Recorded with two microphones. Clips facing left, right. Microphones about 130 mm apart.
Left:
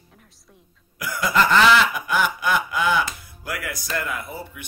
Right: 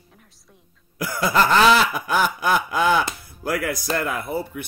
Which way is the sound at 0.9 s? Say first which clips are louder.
Right 1 dB; 35° right (ahead or behind).